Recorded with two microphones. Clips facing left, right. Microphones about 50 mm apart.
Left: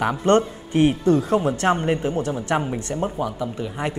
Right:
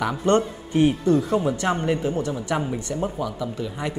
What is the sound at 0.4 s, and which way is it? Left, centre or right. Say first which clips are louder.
A woman's voice: left 1 dB; left.